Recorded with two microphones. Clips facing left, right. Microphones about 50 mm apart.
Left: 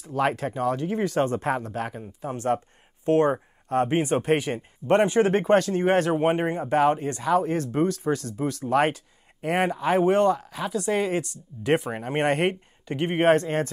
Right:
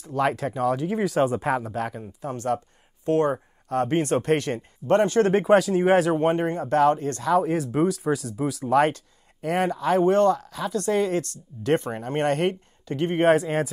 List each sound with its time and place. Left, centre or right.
0.0 s speech: centre
2.3 s speech: left
3.9 s speech: centre
4.8 s speech: left
5.2 s speech: centre
6.1 s speech: centre
7.3 s speech: centre
13.2 s speech: centre